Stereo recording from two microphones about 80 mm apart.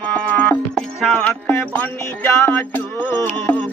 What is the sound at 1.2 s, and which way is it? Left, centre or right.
Music, left.